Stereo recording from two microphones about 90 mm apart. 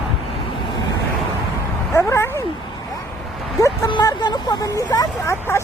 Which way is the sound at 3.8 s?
55° left (ahead or behind).